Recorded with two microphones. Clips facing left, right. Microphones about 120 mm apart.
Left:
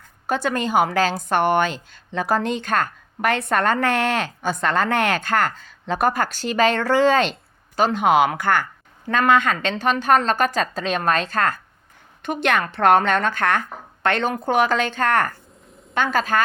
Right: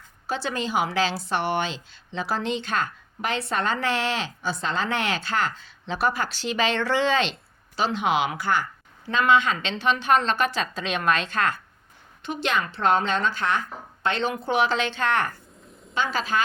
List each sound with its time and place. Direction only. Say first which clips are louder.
0.3 s a woman's voice: left 6 dB; 50° left (ahead or behind)
12.2 s a woman's voice: left 5 dB; 55° left (ahead or behind)